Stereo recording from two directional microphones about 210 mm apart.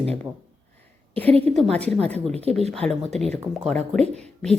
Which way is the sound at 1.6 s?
5° left (ahead or behind).